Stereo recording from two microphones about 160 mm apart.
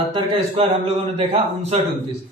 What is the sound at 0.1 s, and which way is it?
Speech, 35° right (ahead or behind).